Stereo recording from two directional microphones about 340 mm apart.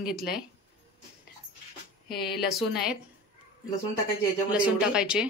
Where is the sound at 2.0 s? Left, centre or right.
Left.